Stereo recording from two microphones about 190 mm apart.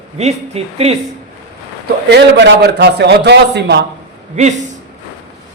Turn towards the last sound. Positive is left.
turn(degrees=-40)  # may be behind; listen again after turning